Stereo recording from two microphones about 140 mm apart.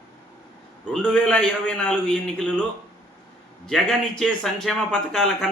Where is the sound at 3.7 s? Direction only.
5° left (ahead or behind).